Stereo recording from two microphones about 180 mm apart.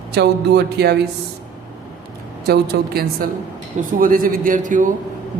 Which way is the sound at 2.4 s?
60° right (ahead or behind).